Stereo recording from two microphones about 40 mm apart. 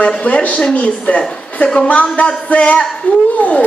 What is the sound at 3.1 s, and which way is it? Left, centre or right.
Speech, left.